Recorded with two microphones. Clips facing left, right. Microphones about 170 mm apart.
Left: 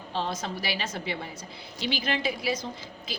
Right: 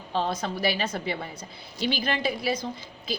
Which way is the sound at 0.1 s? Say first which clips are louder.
Right 4 dB; 45° right (ahead or behind).